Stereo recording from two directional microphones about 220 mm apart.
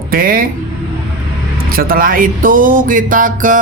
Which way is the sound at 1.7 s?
40° right (ahead or behind).